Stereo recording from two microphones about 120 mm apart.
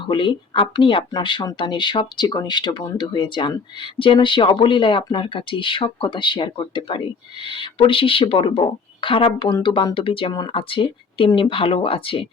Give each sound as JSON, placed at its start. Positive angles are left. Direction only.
{"t": 0.1, "sound": "speech", "side_deg": 40}